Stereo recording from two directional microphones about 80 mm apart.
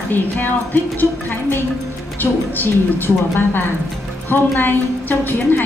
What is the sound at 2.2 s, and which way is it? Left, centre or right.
A woman's voice, left.